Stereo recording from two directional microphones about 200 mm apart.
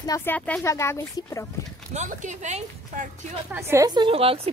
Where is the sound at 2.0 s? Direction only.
35° right (ahead or behind).